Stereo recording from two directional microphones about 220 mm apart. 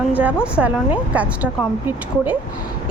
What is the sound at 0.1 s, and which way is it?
A woman's voice, 5° right (ahead or behind).